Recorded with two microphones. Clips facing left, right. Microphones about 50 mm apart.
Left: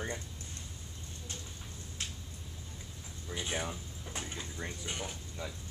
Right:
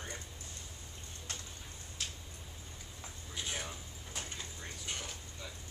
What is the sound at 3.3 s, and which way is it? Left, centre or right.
Speech, centre.